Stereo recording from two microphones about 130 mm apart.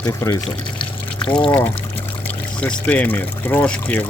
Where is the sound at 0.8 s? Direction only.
40° left (ahead or behind).